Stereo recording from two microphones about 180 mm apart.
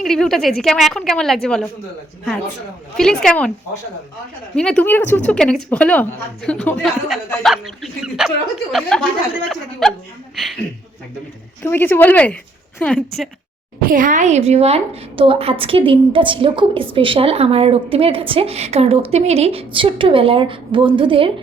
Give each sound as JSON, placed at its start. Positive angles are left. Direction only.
{"t": 0.0, "sound": "a woman's voice", "side_deg": 0}
{"t": 3.0, "sound": "a woman's voice", "side_deg": 5}
{"t": 4.5, "sound": "a woman's voice", "side_deg": 5}
{"t": 11.6, "sound": "a woman's voice", "side_deg": 10}
{"t": 13.8, "sound": "a woman's voice", "side_deg": -45}